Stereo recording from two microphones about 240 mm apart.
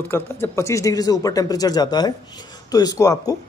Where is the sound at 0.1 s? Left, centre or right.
Centre.